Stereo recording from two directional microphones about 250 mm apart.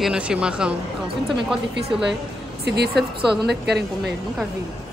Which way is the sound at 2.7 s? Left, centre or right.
Right.